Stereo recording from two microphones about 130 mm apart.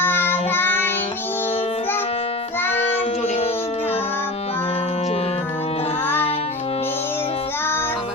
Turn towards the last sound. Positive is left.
turn(degrees=15)  # may be behind; listen again after turning